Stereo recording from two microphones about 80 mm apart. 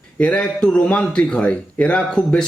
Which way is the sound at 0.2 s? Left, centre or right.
Centre.